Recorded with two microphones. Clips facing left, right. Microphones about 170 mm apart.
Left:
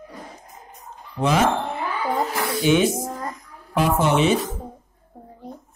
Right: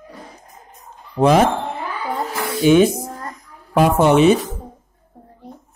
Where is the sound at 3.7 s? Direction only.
50° right (ahead or behind).